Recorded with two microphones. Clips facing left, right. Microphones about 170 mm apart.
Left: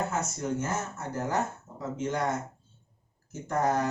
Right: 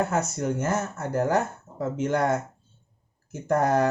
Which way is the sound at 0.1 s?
60° right (ahead or behind).